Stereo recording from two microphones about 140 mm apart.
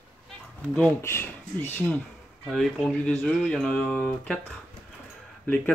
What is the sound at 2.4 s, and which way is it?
Speech, 5° left (ahead or behind).